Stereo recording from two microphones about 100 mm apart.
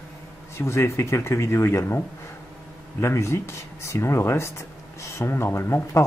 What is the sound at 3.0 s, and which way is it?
Speech, 30° left (ahead or behind).